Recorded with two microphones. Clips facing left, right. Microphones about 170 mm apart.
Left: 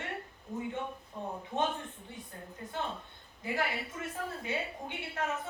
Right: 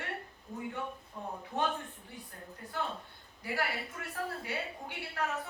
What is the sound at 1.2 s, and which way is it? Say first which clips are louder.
Speech: left 3 dB; 20° left (ahead or behind).